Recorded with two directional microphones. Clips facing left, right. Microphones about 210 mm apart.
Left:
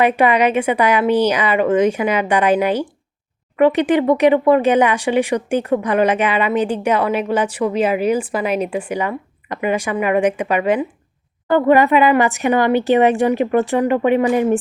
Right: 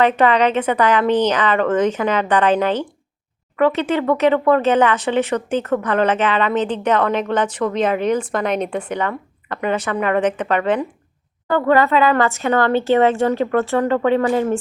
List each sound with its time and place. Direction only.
0.0 s speech: 10° left (ahead or behind)